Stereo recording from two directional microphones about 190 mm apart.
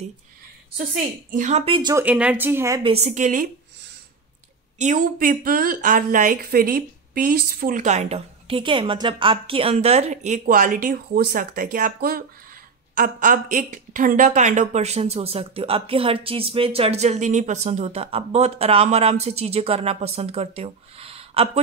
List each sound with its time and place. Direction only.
1.3 s speech: 40° right (ahead or behind); by 2.0 s 20° right (ahead or behind)
2.0 s speech: 5° right (ahead or behind)
2.8 s speech: 35° right (ahead or behind)
4.7 s a woman's voice: 40° right (ahead or behind)